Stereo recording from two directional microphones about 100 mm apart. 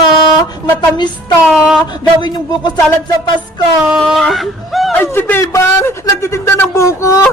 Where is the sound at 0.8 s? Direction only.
45° left (ahead or behind).